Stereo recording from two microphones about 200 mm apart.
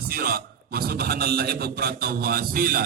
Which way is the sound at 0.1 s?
45° right (ahead or behind).